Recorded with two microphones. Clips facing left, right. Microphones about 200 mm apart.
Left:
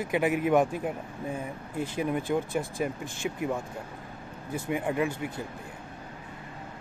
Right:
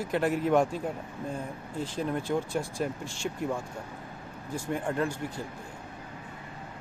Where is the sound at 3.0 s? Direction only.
55° left (ahead or behind).